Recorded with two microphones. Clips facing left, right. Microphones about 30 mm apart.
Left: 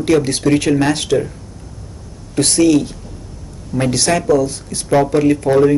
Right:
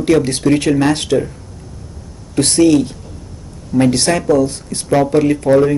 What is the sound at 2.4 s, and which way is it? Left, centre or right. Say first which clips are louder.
Speech: right 1 dB; right.